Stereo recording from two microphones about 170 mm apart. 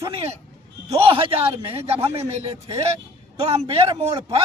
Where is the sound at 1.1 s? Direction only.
35° right (ahead or behind).